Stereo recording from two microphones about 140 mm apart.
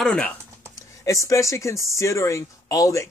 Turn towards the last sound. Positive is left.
turn(degrees=25)  # may be behind; listen again after turning